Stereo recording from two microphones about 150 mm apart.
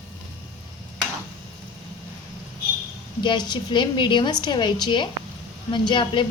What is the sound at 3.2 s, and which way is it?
A woman's voice, 30° left (ahead or behind).